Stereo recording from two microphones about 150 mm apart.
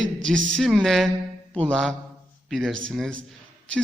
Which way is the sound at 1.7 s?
5° left (ahead or behind).